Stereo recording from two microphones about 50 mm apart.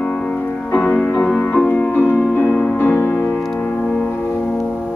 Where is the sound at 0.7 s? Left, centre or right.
Left.